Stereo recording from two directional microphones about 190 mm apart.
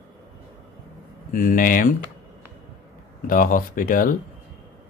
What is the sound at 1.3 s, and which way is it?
Speech, 45° left (ahead or behind).